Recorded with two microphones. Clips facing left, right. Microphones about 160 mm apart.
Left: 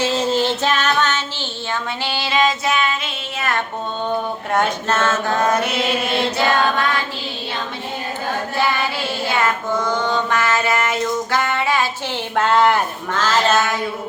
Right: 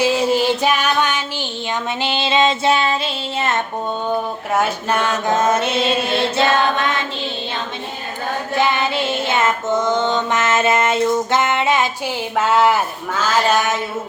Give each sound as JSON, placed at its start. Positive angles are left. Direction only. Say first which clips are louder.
{"t": 0.0, "sound": "a sound", "louder": "right 2 dB", "side_deg": -10}
{"t": 2.0, "sound": "music", "louder": "right 2 dB", "side_deg": -20}
{"t": 4.1, "sound": "mantra", "louder": "even", "side_deg": -5}
{"t": 6.3, "sound": "female singing", "louder": "right 2 dB", "side_deg": -20}
{"t": 8.5, "sound": "female singing", "louder": "right 4 dB", "side_deg": -20}
{"t": 12.4, "sound": "mantra", "louder": "even", "side_deg": -5}